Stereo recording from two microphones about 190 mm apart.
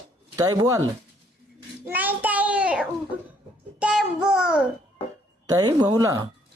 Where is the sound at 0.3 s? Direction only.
20° right (ahead or behind).